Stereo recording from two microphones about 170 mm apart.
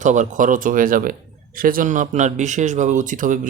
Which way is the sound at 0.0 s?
45° right (ahead or behind).